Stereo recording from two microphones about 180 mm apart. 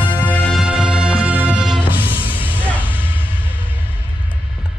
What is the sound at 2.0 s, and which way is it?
Music, 30° left (ahead or behind).